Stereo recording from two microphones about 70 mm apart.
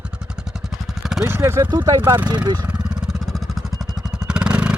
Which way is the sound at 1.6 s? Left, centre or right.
Right.